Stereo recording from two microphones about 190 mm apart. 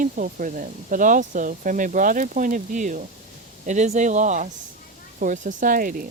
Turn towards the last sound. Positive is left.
turn(degrees=-45)  # may be behind; listen again after turning